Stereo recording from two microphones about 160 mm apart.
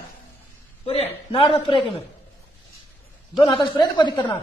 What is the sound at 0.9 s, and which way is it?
Speech, 35° left (ahead or behind).